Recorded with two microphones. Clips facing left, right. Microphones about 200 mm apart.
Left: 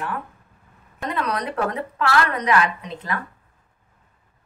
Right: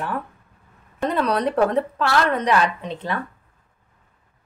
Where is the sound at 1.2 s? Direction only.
30° right (ahead or behind).